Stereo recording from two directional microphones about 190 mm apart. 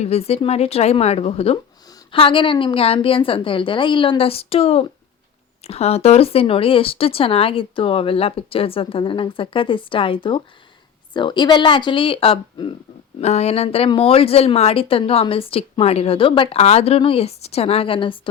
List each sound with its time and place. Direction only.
0.0 s a woman's voice: 35° left (ahead or behind)